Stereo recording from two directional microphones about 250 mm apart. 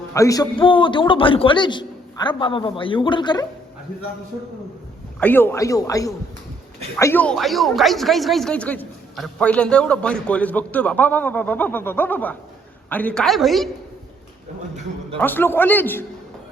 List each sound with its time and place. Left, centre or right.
0.1 s a man's voice: centre
5.2 s a man's voice: centre
15.2 s a man's voice: centre